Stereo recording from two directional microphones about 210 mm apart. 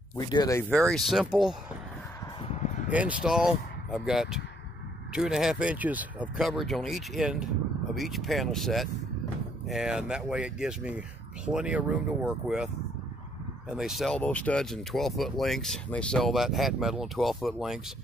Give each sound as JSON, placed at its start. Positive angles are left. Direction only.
{"t": 0.3, "sound": "speech", "side_deg": 15}
{"t": 0.7, "sound": "speech", "side_deg": 5}
{"t": 2.5, "sound": "a sound", "side_deg": 35}
{"t": 2.9, "sound": "speech", "side_deg": -5}
{"t": 13.7, "sound": "speech", "side_deg": 0}